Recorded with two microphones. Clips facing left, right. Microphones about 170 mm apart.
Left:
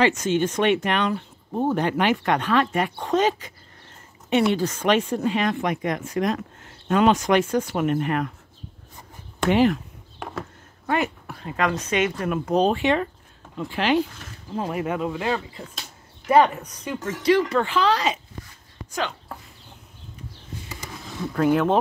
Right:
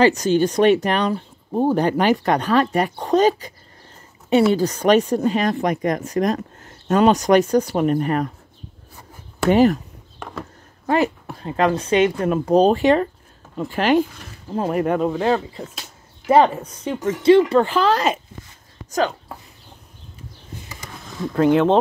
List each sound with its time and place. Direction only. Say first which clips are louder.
0.0 s speech: right 5 dB; 35° right (ahead or behind)
9.5 s speech: right 4 dB; 40° right (ahead or behind)
10.1 s a sound: even; 5° left (ahead or behind)
10.9 s a woman's voice: right 5 dB; 30° right (ahead or behind)